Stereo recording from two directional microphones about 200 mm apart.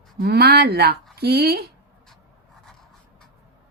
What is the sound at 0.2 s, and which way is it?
Speech, 50° right (ahead or behind).